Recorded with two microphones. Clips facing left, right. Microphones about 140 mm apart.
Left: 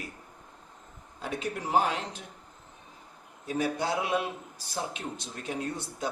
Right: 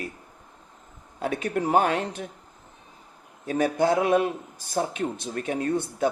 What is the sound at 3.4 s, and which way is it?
A man's voice, 50° right (ahead or behind).